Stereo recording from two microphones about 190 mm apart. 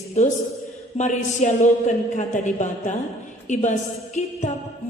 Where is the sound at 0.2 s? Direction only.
40° left (ahead or behind).